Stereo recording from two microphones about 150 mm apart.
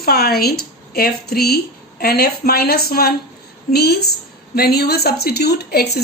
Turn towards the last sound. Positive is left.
turn(degrees=90)